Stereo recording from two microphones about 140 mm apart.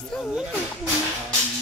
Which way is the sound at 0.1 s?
5° right (ahead or behind).